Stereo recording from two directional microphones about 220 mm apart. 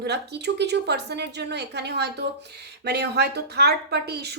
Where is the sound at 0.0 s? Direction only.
50° right (ahead or behind).